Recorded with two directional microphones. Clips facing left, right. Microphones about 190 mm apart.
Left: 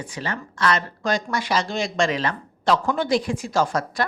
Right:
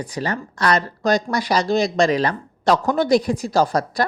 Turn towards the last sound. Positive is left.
turn(degrees=-35)  # may be behind; listen again after turning